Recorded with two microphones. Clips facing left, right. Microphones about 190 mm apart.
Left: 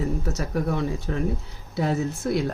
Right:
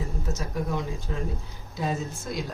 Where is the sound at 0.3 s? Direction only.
70° left (ahead or behind).